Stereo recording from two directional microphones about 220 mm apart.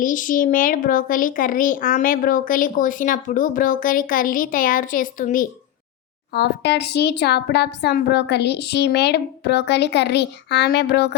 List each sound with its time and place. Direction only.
0.0 s speech: 35° left (ahead or behind)
6.3 s speech: 50° left (ahead or behind)